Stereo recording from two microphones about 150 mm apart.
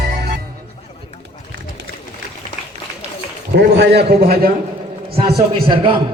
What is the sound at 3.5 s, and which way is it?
A man's voice, 90° right.